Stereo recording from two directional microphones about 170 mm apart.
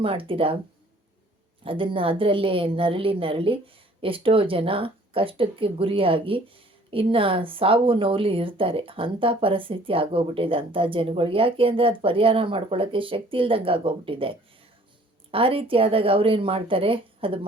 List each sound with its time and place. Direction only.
0.0 s a woman's voice: 30° right (ahead or behind)
1.6 s a woman's voice: 30° right (ahead or behind)